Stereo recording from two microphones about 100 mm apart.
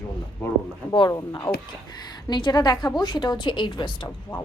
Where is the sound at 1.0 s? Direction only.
35° left (ahead or behind); by 4.0 s 50° left (ahead or behind).